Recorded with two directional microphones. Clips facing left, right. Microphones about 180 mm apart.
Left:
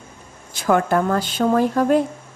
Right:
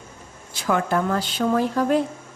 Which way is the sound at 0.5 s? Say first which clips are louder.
Left 4 dB; 50° left (ahead or behind).